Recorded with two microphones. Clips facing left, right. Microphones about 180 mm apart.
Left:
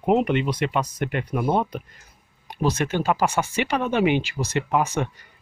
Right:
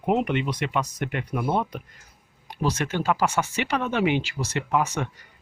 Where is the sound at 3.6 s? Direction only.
15° left (ahead or behind).